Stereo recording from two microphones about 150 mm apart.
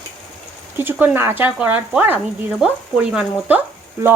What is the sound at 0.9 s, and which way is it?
Speech, 15° right (ahead or behind).